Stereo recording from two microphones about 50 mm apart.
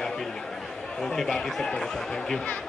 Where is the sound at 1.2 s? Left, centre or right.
Centre.